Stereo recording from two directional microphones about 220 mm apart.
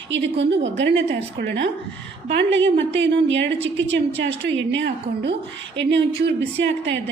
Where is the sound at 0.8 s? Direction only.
55° right (ahead or behind).